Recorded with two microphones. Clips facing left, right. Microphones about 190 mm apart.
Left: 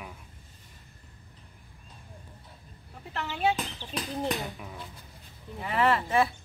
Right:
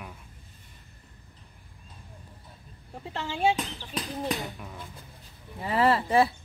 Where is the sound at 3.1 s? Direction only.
25° right (ahead or behind).